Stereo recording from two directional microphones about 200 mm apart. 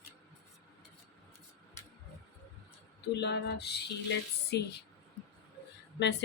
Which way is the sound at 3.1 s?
55° left (ahead or behind).